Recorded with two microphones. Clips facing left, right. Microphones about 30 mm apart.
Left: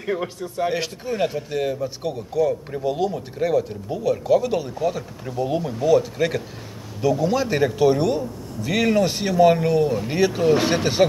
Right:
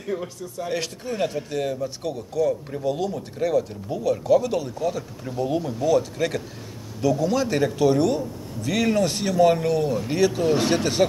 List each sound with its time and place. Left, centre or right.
0.0 s speech: left
0.7 s speech: centre